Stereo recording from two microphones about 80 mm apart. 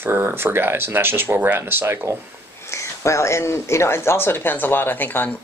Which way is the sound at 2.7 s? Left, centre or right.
Left.